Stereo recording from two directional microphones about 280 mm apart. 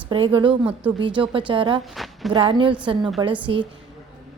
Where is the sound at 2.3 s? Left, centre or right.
Centre.